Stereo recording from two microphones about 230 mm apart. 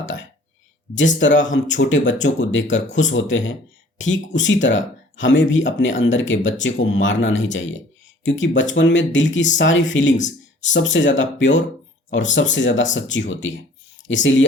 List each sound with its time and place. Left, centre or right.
0.0 s speech: left